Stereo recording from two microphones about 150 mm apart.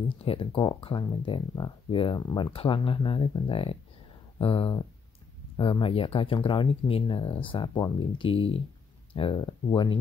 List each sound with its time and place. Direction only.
0.2 s speech: 40° left (ahead or behind)